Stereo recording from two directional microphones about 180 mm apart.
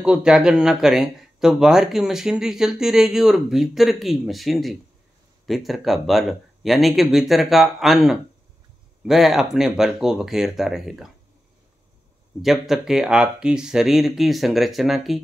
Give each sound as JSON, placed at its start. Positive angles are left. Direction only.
{"t": 0.0, "sound": "speech", "side_deg": -5}
{"t": 12.4, "sound": "speech", "side_deg": 0}